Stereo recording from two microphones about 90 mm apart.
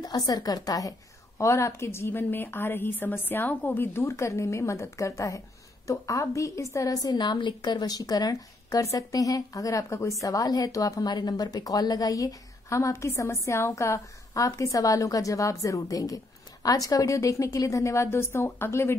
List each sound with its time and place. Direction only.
0.0 s a woman's voice: 45° left (ahead or behind); by 18.9 s 30° left (ahead or behind)